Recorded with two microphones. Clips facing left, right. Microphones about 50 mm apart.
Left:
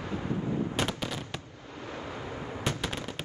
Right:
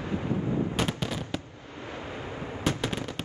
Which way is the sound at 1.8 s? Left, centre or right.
Right.